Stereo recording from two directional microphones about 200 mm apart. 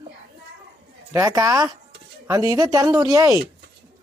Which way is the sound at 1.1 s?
15° right (ahead or behind).